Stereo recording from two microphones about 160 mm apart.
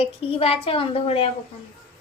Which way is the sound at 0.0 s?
35° left (ahead or behind).